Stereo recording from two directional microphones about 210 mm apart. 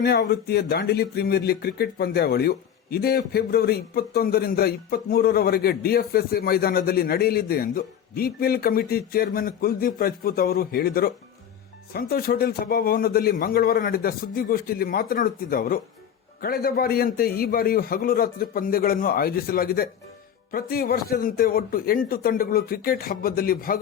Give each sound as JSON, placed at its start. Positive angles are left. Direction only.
{"t": 0.0, "sound": "speech", "side_deg": 50}